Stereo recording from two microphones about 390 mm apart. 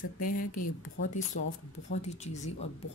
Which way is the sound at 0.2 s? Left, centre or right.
Left.